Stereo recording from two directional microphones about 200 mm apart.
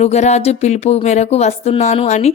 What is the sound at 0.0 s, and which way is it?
Speech, 35° left (ahead or behind).